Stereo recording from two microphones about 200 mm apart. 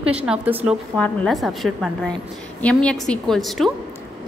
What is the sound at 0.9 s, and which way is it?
A woman's voice, 5° left (ahead or behind).